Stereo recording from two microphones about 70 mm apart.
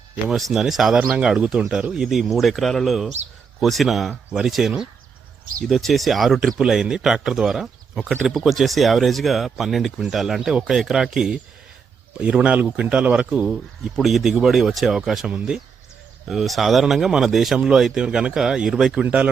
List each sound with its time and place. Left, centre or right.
0.3 s speech: centre
13.9 s speech: centre
16.2 s speech: centre